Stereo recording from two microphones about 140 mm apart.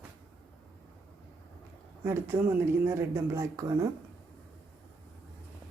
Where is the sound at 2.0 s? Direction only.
20° right (ahead or behind).